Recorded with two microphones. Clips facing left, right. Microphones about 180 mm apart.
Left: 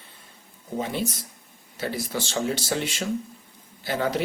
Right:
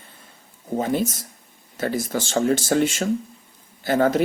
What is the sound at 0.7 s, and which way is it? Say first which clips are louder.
Speech: right 6 dB; 45° right (ahead or behind).